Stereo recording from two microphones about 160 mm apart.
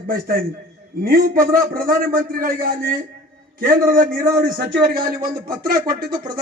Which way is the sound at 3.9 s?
65° right (ahead or behind).